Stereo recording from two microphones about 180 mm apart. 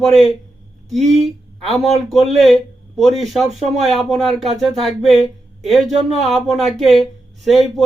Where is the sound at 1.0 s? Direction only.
35° right (ahead or behind).